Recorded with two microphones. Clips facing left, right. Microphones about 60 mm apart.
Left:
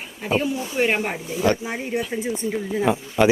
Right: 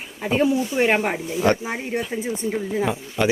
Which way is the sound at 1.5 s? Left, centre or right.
Right.